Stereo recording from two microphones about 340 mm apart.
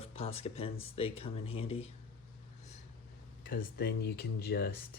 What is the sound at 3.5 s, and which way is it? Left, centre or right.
Speech, left.